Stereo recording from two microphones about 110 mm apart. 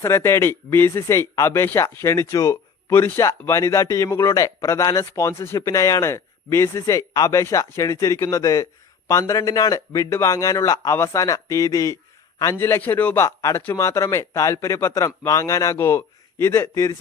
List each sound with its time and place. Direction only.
0.0 s speech: 25° left (ahead or behind)
13.1 s speech: 25° left (ahead or behind)